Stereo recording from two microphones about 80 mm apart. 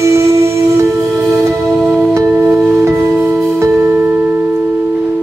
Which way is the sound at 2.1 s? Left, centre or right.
Right.